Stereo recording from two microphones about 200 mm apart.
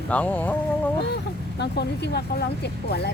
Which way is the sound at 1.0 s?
55° left (ahead or behind).